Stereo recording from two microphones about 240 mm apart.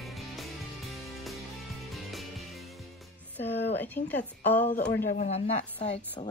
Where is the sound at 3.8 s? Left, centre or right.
Centre.